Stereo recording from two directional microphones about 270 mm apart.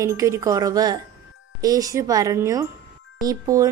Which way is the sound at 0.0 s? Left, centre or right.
Centre.